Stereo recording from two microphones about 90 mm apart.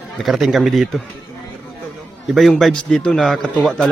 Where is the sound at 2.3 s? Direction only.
Centre (ahead or behind).